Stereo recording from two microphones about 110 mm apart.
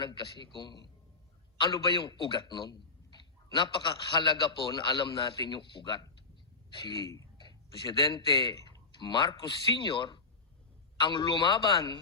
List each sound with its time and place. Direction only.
0.0 s a man's voice: 45° left (ahead or behind)